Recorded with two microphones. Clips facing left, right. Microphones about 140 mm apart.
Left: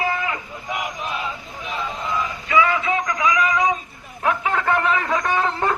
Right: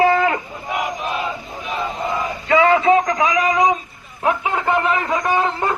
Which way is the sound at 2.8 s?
45° right (ahead or behind).